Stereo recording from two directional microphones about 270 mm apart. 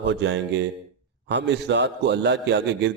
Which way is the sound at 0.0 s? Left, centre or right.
Right.